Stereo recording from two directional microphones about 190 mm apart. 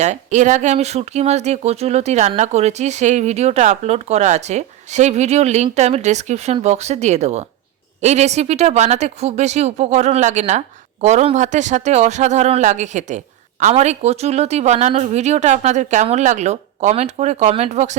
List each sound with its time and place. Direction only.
0.0 s speech: 40° right (ahead or behind)